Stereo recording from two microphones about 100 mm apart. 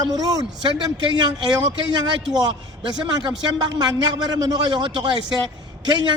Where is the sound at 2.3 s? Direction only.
45° right (ahead or behind).